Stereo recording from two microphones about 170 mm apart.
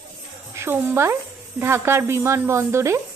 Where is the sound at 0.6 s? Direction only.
15° right (ahead or behind).